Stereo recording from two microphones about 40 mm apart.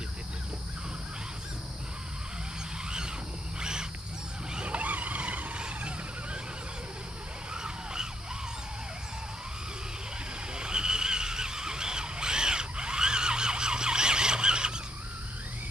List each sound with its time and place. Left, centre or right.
4.6 s vehicle: right
5.6 s vehicle: right
7.6 s emergency vehicle: centre
10.6 s a sound: centre